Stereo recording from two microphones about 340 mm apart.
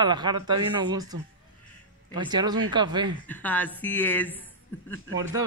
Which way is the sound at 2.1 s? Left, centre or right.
Centre.